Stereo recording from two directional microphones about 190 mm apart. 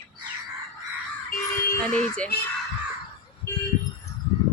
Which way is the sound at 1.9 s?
5° left (ahead or behind).